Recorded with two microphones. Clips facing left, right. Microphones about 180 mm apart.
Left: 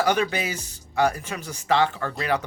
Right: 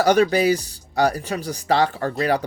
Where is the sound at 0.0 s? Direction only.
40° right (ahead or behind).